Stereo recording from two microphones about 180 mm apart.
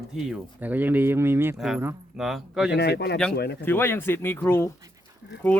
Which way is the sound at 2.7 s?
65° left (ahead or behind).